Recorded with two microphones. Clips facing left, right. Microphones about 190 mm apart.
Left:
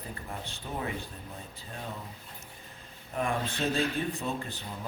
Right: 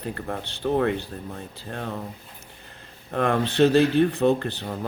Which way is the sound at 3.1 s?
75° right (ahead or behind).